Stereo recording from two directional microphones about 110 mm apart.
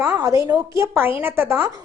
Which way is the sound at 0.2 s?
30° right (ahead or behind).